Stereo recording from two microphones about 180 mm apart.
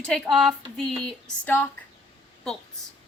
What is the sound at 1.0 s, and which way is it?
Speech, 10° left (ahead or behind).